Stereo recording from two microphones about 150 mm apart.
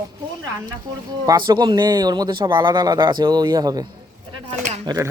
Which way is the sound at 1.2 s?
30° right (ahead or behind).